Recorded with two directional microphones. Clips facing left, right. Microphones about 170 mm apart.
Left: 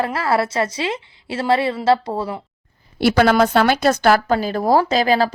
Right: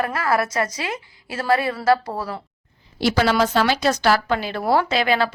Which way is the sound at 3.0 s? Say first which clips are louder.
Left 4 dB; 55° left (ahead or behind).